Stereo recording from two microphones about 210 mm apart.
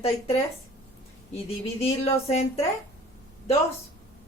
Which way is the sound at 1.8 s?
30° left (ahead or behind).